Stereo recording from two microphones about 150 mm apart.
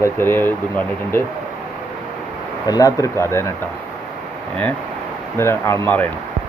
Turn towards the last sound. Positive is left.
turn(degrees=10)  # may be behind; listen again after turning